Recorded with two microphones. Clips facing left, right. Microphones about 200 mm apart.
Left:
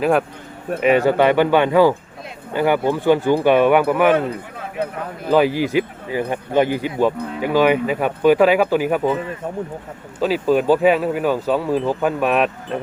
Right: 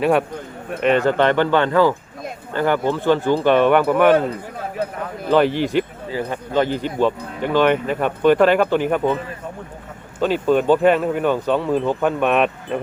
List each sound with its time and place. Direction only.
0.0 s speech: centre (ahead or behind)
5.3 s speech: 5° left (ahead or behind)
10.2 s speech: 5° left (ahead or behind)